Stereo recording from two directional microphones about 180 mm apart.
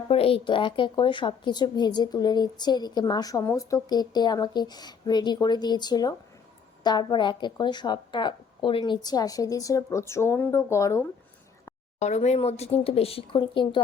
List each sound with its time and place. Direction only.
0.1 s a woman's voice: 30° left (ahead or behind); by 11.1 s 15° left (ahead or behind)
11.9 s speech: 40° left (ahead or behind)